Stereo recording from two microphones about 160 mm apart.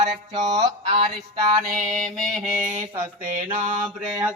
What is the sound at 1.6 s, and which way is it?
Mantra, 65° right (ahead or behind).